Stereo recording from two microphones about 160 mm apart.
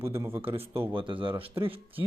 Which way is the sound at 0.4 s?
35° right (ahead or behind).